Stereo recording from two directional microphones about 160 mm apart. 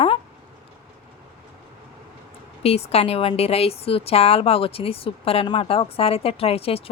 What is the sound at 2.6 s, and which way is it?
A woman's voice, 40° left (ahead or behind).